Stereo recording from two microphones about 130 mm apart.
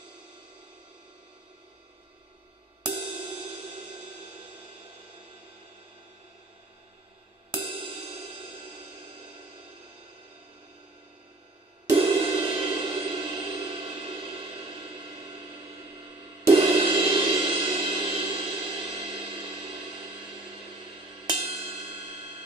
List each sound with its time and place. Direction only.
3.0 s music: 40° right (ahead or behind)
7.5 s music: 40° right (ahead or behind)
12.0 s music: 40° right (ahead or behind)